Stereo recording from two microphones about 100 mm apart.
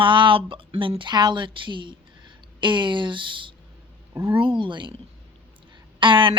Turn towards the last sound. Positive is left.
turn(degrees=-55)  # may be behind; listen again after turning